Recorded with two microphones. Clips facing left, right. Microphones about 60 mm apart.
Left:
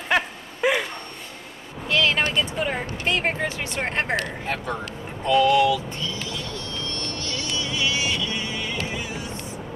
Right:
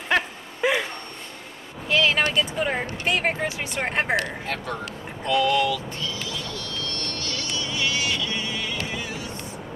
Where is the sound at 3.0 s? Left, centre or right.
Centre.